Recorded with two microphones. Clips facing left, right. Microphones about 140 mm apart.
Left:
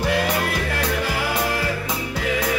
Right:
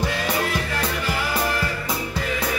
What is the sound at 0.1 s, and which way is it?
Music, 65° left (ahead or behind).